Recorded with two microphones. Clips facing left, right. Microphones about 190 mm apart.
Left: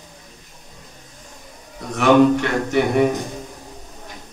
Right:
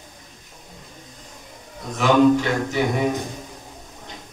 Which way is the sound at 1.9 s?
65° left (ahead or behind).